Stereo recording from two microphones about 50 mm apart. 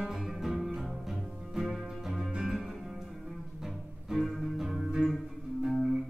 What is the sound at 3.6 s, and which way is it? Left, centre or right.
Music, centre.